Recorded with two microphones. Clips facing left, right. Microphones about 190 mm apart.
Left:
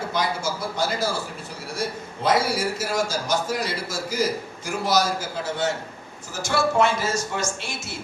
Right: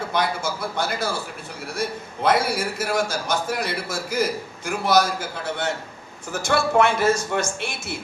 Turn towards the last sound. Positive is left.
turn(degrees=-55)  # may be behind; listen again after turning